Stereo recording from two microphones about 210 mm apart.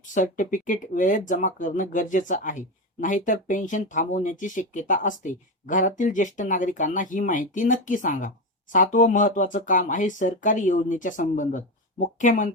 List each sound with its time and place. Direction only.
0.1 s speech: 35° left (ahead or behind)